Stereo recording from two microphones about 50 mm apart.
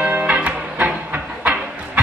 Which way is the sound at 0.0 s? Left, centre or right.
Right.